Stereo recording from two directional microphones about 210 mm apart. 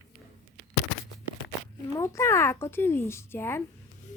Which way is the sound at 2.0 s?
15° left (ahead or behind).